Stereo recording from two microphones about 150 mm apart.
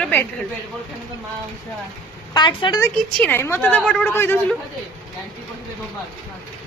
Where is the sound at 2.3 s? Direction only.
30° left (ahead or behind).